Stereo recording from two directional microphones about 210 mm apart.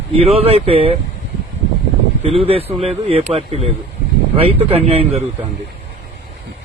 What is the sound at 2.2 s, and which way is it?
A man's voice, 25° right (ahead or behind).